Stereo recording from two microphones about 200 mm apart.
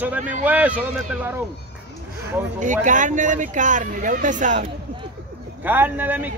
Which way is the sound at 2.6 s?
40° right (ahead or behind).